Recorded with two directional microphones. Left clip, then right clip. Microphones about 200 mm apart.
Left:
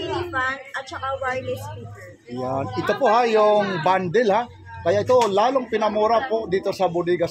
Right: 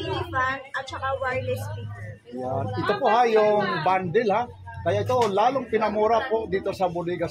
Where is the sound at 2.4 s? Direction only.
55° left (ahead or behind).